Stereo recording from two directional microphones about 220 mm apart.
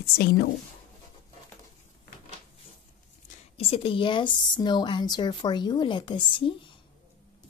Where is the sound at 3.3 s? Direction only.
25° left (ahead or behind).